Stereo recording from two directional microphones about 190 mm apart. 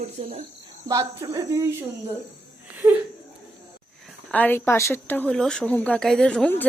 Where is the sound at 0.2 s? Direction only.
30° right (ahead or behind).